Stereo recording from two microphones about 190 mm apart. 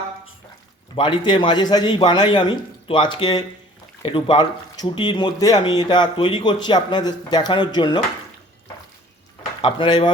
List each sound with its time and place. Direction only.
0.9 s speech: 25° left (ahead or behind)
9.6 s speech: 25° left (ahead or behind)